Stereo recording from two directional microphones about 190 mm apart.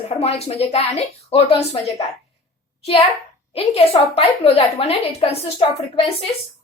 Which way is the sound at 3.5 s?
30° left (ahead or behind).